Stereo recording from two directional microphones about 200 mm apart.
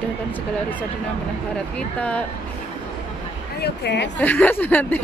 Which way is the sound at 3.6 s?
55° left (ahead or behind).